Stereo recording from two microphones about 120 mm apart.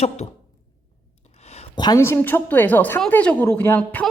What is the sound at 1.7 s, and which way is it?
Speech, 35° left (ahead or behind).